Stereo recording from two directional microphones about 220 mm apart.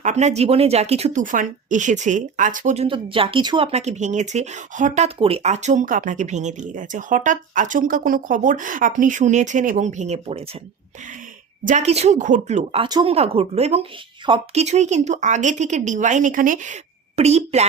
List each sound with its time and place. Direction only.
0.0 s a woman's voice: 30° right (ahead or behind)
11.6 s a woman's voice: 35° right (ahead or behind)